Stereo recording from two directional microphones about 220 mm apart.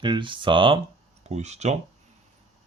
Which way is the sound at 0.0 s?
20° right (ahead or behind).